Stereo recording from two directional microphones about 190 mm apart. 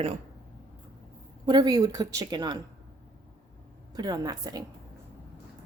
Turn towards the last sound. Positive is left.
turn(degrees=-20)  # may be behind; listen again after turning